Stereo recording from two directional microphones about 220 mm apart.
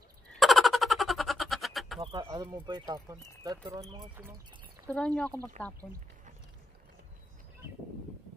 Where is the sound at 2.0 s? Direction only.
20° right (ahead or behind).